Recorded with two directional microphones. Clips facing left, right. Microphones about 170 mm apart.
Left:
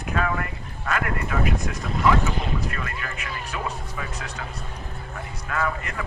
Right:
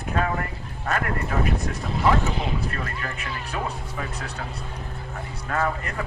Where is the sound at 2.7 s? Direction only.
35° right (ahead or behind).